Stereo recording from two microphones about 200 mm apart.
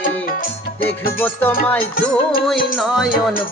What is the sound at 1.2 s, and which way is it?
Music, 10° left (ahead or behind).